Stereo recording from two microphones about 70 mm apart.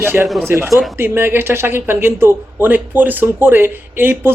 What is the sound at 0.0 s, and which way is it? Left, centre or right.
Speech, right.